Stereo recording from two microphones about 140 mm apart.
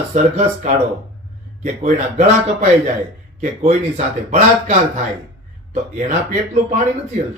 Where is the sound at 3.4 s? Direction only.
50° right (ahead or behind).